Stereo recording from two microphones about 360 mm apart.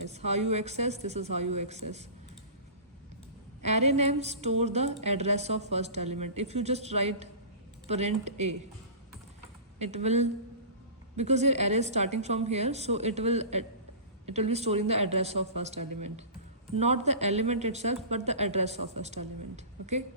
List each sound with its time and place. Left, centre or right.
0.1 s a woman's voice: centre
3.6 s a woman's voice: centre
9.7 s a woman's voice: centre